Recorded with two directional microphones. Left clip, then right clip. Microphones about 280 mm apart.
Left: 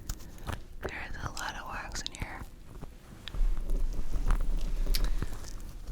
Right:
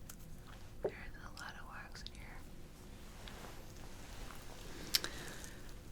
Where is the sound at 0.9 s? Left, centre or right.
Left.